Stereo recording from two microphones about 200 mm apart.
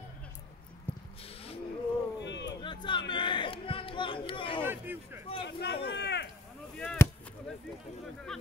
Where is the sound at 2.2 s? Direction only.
60° left (ahead or behind).